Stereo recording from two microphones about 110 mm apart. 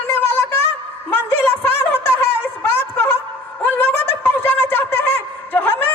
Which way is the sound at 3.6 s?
20° left (ahead or behind).